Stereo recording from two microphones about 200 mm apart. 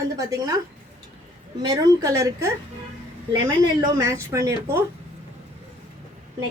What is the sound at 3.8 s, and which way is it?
A woman's voice, 15° right (ahead or behind).